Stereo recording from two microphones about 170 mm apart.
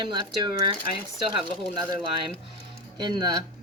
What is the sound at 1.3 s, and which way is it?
Speech, 25° right (ahead or behind).